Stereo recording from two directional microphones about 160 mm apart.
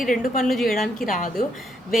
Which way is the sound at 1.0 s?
55° left (ahead or behind).